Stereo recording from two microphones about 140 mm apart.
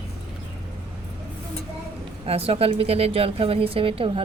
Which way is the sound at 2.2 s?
45° right (ahead or behind).